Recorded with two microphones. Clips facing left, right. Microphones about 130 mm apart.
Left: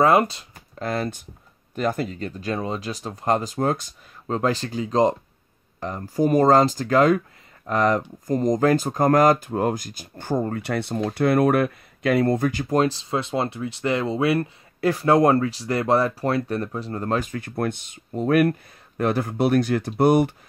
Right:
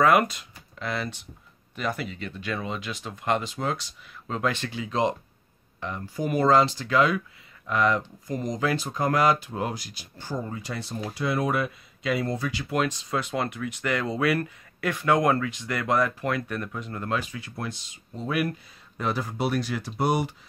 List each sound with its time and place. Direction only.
0.0 s speech: 30° left (ahead or behind); by 20.3 s 55° left (ahead or behind)